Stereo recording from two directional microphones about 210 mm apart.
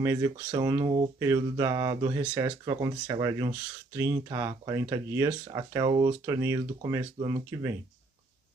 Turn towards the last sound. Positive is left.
turn(degrees=-15)  # may be behind; listen again after turning